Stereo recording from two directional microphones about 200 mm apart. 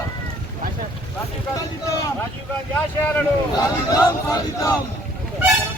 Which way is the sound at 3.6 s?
15° left (ahead or behind).